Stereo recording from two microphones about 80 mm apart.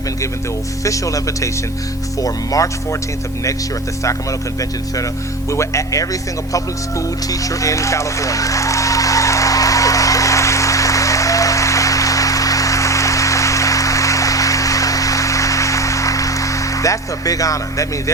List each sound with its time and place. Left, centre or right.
0.9 s speech: left
5.5 s speech: left
7.3 s music: left